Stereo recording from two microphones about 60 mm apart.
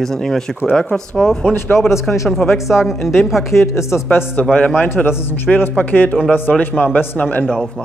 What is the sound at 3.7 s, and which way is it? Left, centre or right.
Speech, left.